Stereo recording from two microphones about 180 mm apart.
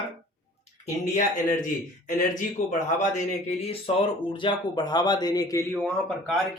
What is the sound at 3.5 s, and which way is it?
Speech, 35° left (ahead or behind).